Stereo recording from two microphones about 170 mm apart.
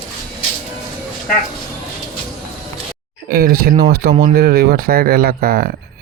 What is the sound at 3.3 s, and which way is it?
Speech, 65° right (ahead or behind).